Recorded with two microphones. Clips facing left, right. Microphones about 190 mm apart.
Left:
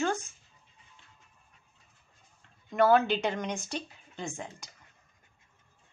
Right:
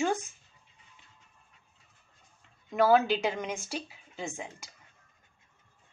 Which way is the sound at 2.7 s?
5° right (ahead or behind).